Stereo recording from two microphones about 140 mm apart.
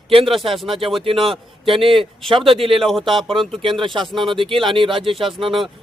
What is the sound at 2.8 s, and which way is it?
Speech, centre (ahead or behind).